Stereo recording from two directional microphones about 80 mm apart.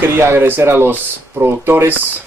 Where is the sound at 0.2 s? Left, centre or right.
Right.